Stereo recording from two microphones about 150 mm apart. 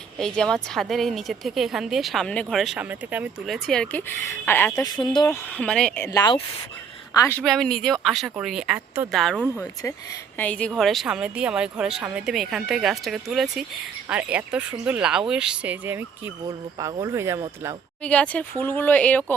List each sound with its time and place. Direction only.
0.2 s a woman's voice: 5° left (ahead or behind)
3.5 s speech: 5° left (ahead or behind); by 5.4 s 25° left (ahead or behind)
5.5 s speech: 10° left (ahead or behind)
6.0 s a woman's voice: 25° left (ahead or behind)
7.4 s a woman's voice: centre (ahead or behind)
10.3 s a woman's voice: 10° left (ahead or behind); by 17.4 s 20° right (ahead or behind)
18.0 s speech: 10° left (ahead or behind)